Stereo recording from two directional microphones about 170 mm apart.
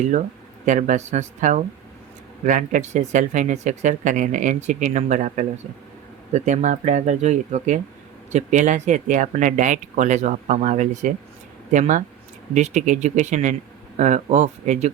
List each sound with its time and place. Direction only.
0.6 s speech: 45° right (ahead or behind)